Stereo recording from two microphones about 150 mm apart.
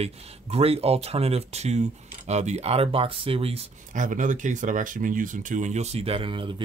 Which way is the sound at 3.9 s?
60° right (ahead or behind).